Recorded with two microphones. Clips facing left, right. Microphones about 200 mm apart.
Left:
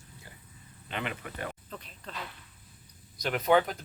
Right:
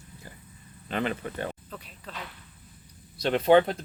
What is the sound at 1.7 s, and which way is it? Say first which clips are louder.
Speech: right 1 dB; 5° right (ahead or behind).